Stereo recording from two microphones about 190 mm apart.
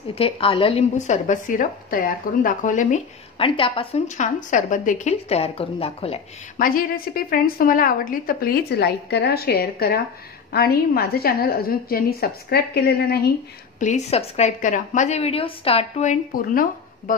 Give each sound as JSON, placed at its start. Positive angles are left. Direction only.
{"t": 0.1, "sound": "speech", "side_deg": 30}
{"t": 3.3, "sound": "speech", "side_deg": 30}
{"t": 6.6, "sound": "a woman's voice", "side_deg": 50}
{"t": 13.7, "sound": "speech", "side_deg": 40}